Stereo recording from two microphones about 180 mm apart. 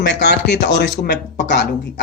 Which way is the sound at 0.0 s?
70° left (ahead or behind).